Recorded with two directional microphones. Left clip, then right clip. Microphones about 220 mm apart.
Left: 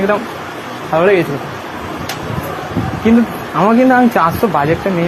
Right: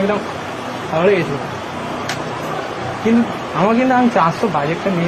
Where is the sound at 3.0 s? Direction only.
50° left (ahead or behind).